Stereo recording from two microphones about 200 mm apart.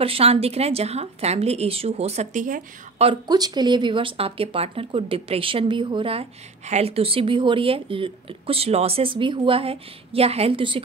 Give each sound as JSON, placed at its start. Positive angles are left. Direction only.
{"t": 0.0, "sound": "a woman's voice", "side_deg": -30}
{"t": 3.1, "sound": "speech", "side_deg": -20}